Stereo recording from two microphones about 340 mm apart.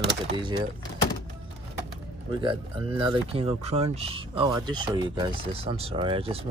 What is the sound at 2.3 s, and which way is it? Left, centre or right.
Speech, centre.